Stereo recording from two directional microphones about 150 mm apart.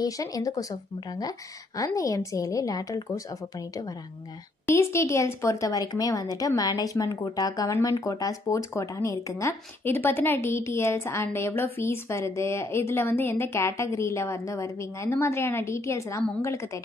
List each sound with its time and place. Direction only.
0.0 s a woman's voice: 25° left (ahead or behind)